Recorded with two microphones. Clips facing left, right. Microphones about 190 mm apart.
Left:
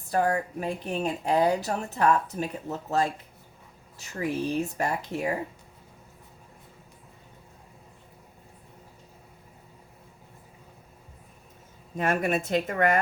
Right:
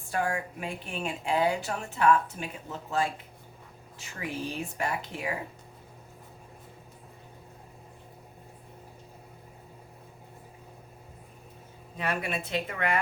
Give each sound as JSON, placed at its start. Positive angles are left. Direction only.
{"t": 0.1, "sound": "a woman's voice", "side_deg": 40}
{"t": 11.9, "sound": "a woman's voice", "side_deg": 45}